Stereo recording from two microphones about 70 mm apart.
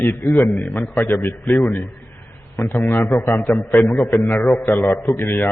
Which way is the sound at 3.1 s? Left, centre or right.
Left.